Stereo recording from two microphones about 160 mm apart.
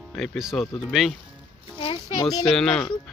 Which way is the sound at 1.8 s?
30° left (ahead or behind).